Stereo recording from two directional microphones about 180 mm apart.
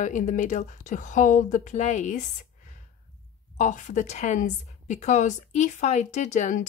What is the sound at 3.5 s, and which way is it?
Speech, 45° left (ahead or behind).